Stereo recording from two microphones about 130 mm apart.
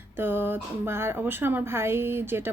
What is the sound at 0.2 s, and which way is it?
Speech, 15° right (ahead or behind).